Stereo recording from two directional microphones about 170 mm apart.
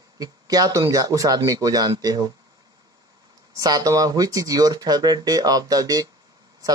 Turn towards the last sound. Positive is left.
turn(degrees=-20)  # may be behind; listen again after turning